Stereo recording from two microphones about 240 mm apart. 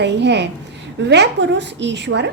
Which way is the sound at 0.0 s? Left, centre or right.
Right.